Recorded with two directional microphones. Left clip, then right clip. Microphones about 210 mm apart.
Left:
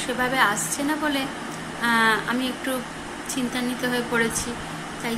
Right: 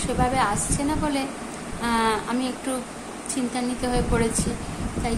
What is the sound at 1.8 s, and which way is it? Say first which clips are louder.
Speech: left 3 dB; 5° right (ahead or behind).